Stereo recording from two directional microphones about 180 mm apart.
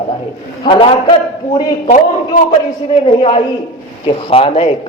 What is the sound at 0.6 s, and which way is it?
Speech, 30° left (ahead or behind).